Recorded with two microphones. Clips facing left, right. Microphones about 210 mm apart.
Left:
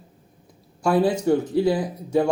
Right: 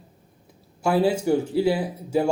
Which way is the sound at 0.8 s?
25° right (ahead or behind).